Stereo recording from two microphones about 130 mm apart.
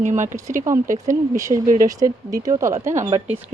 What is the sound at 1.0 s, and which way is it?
Speech, 25° right (ahead or behind).